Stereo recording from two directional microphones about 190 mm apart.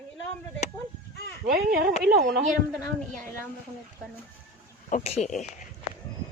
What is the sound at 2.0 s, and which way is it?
Speech, 55° right (ahead or behind).